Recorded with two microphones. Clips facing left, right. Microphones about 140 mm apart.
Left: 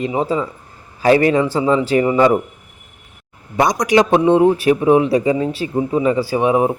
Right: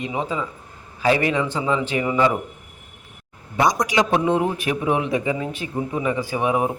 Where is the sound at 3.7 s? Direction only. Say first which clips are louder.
Left 7 dB; 65° left (ahead or behind).